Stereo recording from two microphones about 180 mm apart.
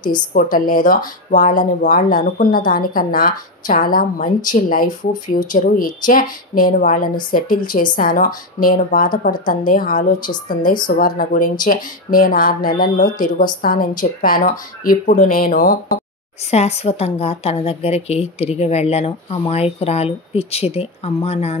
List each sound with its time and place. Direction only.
0.4 s speech: 50° left (ahead or behind)
16.4 s a woman's voice: 35° left (ahead or behind)